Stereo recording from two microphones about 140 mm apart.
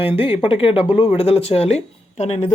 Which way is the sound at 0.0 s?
40° left (ahead or behind).